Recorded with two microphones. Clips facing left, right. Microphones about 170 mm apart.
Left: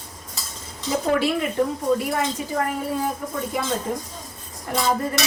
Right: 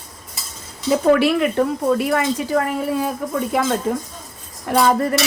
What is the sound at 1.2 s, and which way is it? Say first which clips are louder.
A woman's voice: right 5 dB; 70° right (ahead or behind).